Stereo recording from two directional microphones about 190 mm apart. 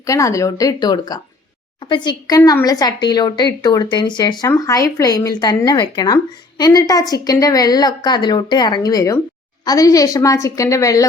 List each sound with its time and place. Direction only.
0.0 s a woman's voice: 15° left (ahead or behind)